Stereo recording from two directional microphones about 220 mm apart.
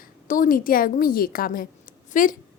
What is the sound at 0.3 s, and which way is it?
A woman's voice, 40° left (ahead or behind).